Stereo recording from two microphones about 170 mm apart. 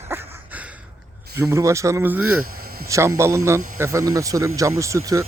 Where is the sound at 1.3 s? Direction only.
15° right (ahead or behind).